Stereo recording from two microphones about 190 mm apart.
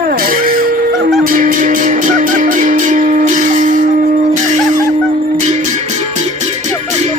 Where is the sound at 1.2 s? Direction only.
45° right (ahead or behind).